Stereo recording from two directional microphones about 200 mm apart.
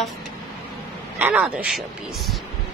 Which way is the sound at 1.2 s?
10° right (ahead or behind).